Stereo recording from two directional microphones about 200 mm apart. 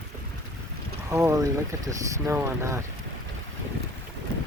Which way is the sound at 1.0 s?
20° right (ahead or behind).